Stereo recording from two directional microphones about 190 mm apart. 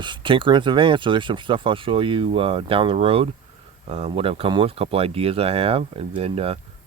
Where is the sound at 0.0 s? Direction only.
25° right (ahead or behind).